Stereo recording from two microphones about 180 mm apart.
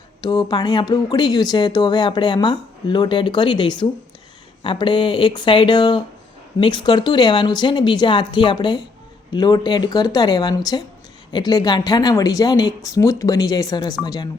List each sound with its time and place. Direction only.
0.2 s speech: 20° left (ahead or behind)